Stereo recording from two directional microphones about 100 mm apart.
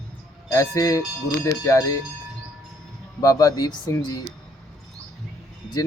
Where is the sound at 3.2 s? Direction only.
40° left (ahead or behind).